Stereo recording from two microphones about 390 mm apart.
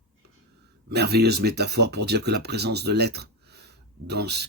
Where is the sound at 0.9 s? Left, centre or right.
Right.